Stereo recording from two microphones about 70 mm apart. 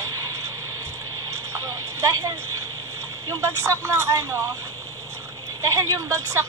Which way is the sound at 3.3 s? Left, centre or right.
Right.